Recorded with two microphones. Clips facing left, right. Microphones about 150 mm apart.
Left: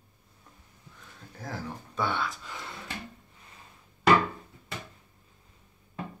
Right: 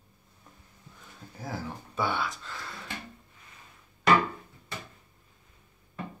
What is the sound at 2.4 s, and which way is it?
Speech, 20° left (ahead or behind).